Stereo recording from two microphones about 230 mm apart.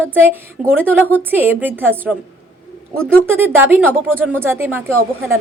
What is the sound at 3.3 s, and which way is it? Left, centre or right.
A woman's voice, centre.